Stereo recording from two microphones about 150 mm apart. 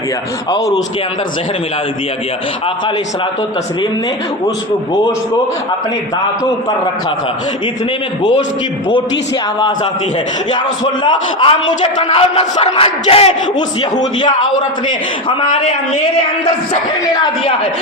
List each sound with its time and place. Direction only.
11.0 s speech: 35° left (ahead or behind)
14.0 s a man's voice: 30° left (ahead or behind)
17.2 s speech: 35° left (ahead or behind)